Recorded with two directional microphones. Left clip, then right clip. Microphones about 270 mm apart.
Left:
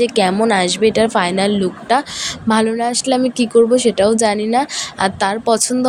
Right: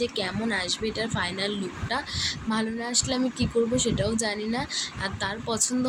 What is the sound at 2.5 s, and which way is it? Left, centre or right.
Speech, left.